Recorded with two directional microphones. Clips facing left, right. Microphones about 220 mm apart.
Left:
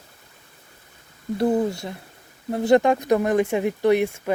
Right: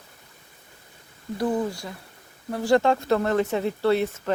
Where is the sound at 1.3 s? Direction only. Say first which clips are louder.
Left 4 dB; 25° left (ahead or behind).